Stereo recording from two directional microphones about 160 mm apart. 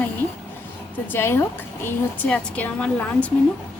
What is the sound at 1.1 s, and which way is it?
A woman's voice, 15° left (ahead or behind).